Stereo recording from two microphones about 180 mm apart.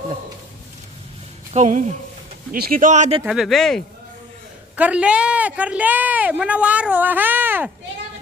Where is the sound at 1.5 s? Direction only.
40° right (ahead or behind).